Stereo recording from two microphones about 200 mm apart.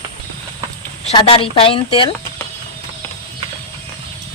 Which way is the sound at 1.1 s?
25° left (ahead or behind).